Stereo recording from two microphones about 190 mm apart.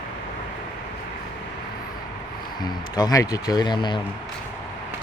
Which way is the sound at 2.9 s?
20° left (ahead or behind).